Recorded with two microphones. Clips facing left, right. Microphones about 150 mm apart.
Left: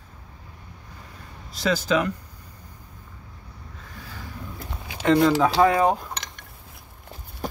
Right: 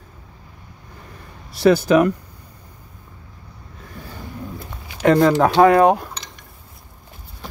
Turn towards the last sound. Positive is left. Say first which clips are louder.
# left 1 dB
turn(degrees=60)  # may be behind; listen again after turning